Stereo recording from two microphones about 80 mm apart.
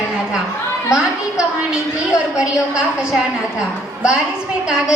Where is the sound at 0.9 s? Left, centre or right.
Centre.